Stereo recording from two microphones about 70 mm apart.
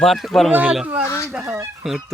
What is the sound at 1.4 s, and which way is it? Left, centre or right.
Speech, right.